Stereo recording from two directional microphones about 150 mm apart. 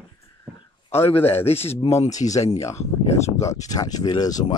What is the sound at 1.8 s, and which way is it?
Speech, 35° left (ahead or behind).